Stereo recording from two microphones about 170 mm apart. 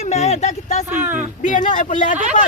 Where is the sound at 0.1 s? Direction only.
40° left (ahead or behind).